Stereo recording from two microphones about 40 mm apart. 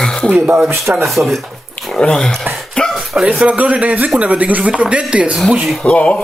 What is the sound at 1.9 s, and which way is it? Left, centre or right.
Speech, left.